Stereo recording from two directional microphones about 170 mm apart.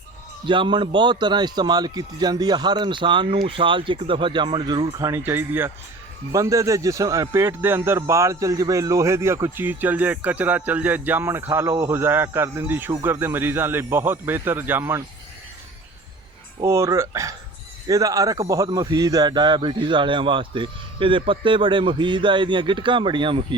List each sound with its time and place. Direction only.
0.4 s a man's voice: 30° right (ahead or behind); by 15.0 s 15° right (ahead or behind)
16.6 s a man's voice: 15° right (ahead or behind)